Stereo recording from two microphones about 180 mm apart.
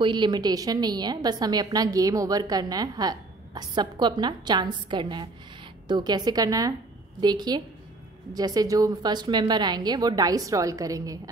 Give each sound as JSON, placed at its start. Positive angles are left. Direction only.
{"t": 0.0, "sound": "a woman's voice", "side_deg": -25}